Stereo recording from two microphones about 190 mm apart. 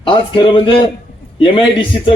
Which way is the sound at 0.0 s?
25° left (ahead or behind).